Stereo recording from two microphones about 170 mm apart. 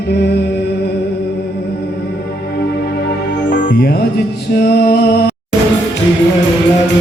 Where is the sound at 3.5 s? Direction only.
65° left (ahead or behind).